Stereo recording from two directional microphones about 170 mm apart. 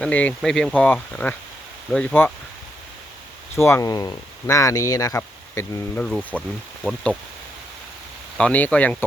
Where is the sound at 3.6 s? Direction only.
15° left (ahead or behind).